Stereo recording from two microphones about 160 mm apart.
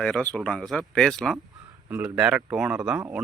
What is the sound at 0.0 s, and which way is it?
Speech, 5° left (ahead or behind).